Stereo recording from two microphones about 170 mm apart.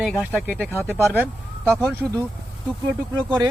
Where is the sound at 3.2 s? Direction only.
5° left (ahead or behind).